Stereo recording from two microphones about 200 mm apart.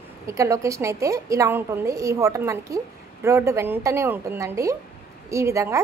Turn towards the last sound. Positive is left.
turn(degrees=-15)  # may be behind; listen again after turning